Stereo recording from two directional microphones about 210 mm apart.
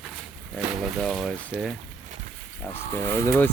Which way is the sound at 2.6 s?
10° left (ahead or behind).